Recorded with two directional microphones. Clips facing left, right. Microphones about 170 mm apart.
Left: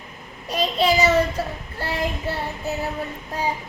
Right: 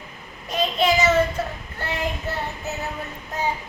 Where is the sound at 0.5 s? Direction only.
30° left (ahead or behind).